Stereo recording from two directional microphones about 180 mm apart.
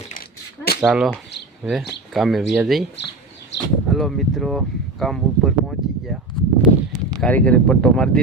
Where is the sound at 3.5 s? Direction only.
75° left (ahead or behind).